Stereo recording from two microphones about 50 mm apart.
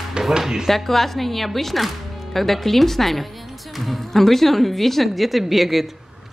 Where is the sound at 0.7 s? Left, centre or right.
Centre.